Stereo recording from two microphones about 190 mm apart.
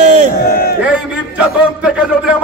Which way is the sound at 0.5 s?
50° left (ahead or behind).